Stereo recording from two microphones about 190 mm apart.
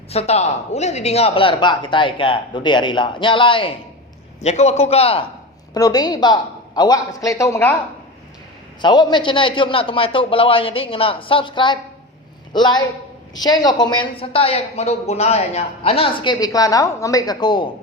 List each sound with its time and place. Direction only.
0.1 s a woman's voice: 35° left (ahead or behind)
5.7 s a woman's voice: 20° left (ahead or behind)
8.8 s a woman's voice: 25° left (ahead or behind)